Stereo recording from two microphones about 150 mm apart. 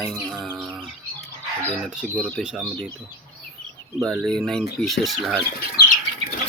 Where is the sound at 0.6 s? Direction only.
Centre (ahead or behind).